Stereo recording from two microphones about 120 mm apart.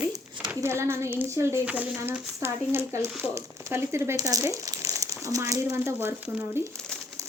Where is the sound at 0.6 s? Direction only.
25° right (ahead or behind).